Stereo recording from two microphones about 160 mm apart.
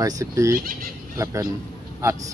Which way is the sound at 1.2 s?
20° right (ahead or behind).